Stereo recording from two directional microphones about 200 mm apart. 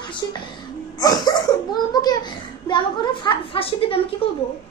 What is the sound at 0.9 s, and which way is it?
A child's voice, 20° left (ahead or behind).